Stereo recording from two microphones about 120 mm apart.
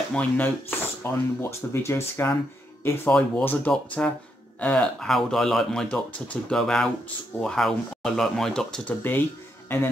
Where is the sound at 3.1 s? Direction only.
10° left (ahead or behind).